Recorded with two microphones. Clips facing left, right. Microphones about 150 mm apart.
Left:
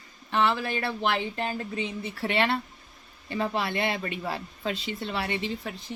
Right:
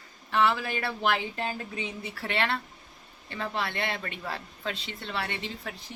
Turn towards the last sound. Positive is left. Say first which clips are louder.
# left 5 dB
turn(degrees=0)  # may be behind; listen again after turning